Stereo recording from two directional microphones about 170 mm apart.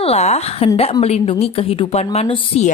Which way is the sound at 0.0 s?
40° left (ahead or behind).